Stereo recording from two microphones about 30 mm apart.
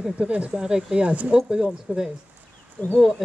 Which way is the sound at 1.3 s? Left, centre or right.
Right.